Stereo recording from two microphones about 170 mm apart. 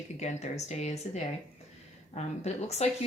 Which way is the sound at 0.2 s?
40° left (ahead or behind).